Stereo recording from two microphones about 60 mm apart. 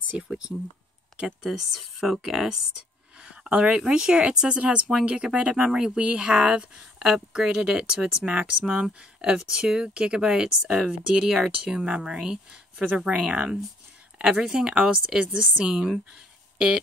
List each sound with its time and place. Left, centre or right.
1.4 s speech: centre
3.3 s speech: centre